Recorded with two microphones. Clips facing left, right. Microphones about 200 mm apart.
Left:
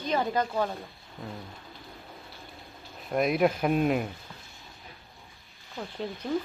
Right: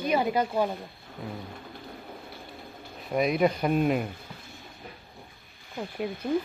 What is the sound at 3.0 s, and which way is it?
Speech, centre (ahead or behind).